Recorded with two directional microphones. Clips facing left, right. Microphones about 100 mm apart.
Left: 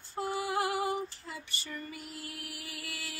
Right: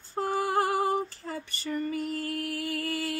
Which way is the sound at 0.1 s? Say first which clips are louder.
Right 6 dB; 50° right (ahead or behind).